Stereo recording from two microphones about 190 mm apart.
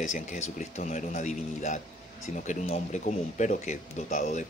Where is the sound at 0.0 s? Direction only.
40° left (ahead or behind).